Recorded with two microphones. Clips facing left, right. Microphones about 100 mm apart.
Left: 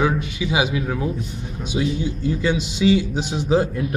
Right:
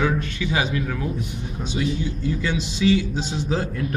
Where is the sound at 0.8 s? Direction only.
25° left (ahead or behind).